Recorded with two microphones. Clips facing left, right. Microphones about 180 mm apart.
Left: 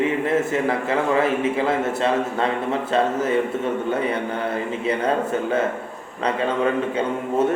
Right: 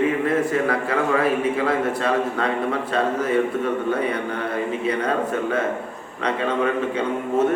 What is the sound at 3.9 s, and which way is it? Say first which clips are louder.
A man's voice: even; 30° left (ahead or behind).